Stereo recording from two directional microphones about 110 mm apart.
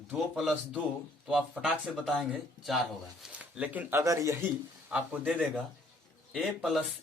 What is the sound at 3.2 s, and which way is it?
Speech, 10° right (ahead or behind).